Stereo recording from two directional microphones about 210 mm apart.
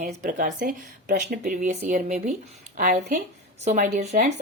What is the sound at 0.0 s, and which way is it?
Speech, 40° right (ahead or behind).